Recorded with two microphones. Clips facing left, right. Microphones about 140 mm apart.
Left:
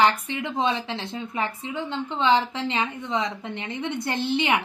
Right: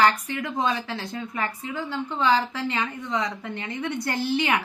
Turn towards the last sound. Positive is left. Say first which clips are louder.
# left 1 dB
turn(degrees=25)  # may be behind; listen again after turning